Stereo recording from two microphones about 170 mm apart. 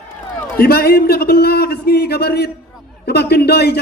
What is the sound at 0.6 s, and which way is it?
A man's voice, 65° left (ahead or behind).